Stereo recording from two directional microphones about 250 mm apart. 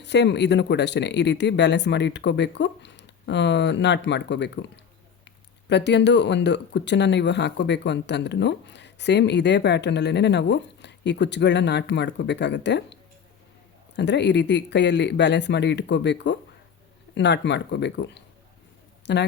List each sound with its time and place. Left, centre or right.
0.0 s speech: left
5.6 s speech: left